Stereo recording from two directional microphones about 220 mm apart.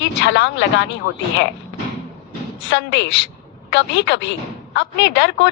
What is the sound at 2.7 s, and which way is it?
Speech, 55° left (ahead or behind).